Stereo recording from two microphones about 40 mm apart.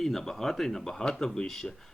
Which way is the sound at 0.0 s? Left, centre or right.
Centre.